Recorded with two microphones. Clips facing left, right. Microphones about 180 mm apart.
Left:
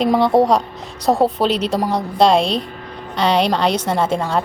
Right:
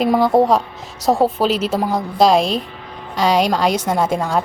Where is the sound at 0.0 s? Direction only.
5° right (ahead or behind).